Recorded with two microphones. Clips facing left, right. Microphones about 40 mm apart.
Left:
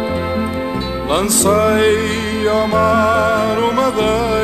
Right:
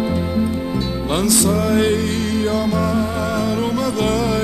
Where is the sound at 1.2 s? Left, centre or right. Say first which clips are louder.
Left 4 dB; left.